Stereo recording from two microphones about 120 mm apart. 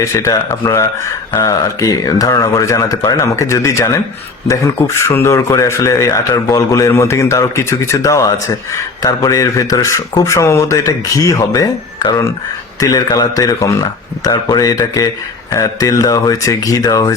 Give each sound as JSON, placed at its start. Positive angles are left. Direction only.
{"t": 0.0, "sound": "speech", "side_deg": 25}